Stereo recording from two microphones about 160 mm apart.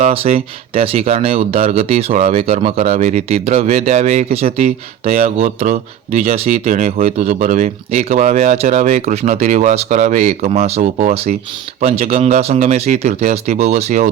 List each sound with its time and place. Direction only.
0.0 s speech: 40° right (ahead or behind)